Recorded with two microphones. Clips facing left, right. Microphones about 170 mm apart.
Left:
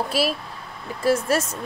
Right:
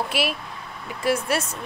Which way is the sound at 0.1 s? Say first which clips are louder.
Left 3 dB; 35° left (ahead or behind).